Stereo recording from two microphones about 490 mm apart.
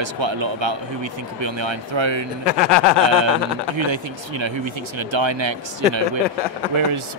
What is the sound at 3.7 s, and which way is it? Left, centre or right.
Speech, right.